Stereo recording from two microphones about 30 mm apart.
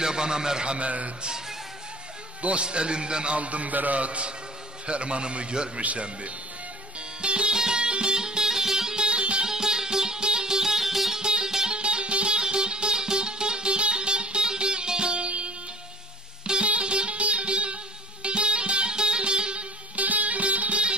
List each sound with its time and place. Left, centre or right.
0.0 s a man's voice: right
0.7 s a man's voice: right
2.6 s a man's voice: right
3.3 s a man's voice: right
7.2 s music: right; by 9.0 s centre
9.0 s music: right
9.5 s music: centre
10.8 s music: centre
11.1 s music: right
11.7 s music: right
15.2 s music: right
16.6 s music: right
20.0 s music: right